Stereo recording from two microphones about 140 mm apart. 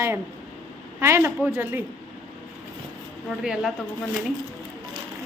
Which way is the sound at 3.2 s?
Centre (ahead or behind).